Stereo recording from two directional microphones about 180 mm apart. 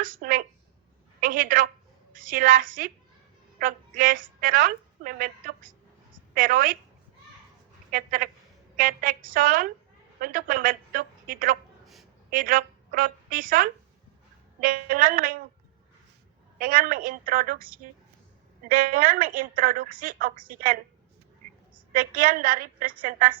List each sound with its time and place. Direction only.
0.0 s a woman's voice: 50° right (ahead or behind)
7.9 s a woman's voice: 50° right (ahead or behind)
16.6 s a woman's voice: 50° right (ahead or behind)
18.6 s a woman's voice: 50° right (ahead or behind)
21.9 s a woman's voice: 50° right (ahead or behind)